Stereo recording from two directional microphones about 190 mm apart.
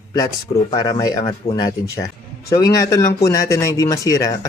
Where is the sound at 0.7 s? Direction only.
20° left (ahead or behind).